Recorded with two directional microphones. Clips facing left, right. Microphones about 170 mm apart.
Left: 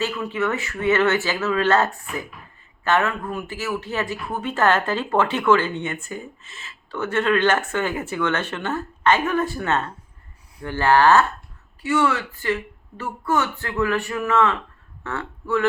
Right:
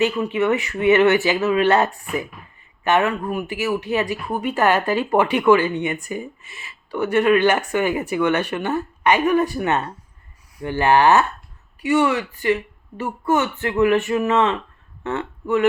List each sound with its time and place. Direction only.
0.0 s speech: 20° right (ahead or behind)